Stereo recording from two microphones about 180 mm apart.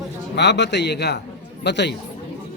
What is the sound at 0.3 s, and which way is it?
A man's voice, 75° left (ahead or behind).